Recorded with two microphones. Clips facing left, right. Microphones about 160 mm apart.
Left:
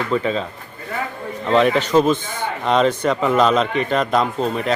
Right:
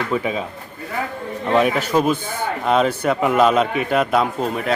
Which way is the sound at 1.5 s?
10° right (ahead or behind).